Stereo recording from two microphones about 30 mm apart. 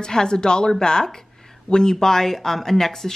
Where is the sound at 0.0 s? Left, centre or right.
Left.